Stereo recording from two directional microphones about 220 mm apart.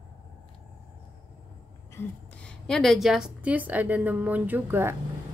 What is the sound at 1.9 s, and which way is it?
A woman's voice, 5° left (ahead or behind).